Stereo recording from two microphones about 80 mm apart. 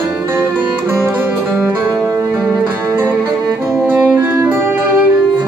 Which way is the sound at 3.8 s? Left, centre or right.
Right.